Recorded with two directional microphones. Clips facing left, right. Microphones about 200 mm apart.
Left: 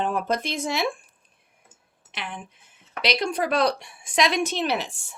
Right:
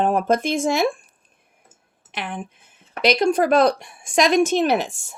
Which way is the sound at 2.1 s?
50° right (ahead or behind).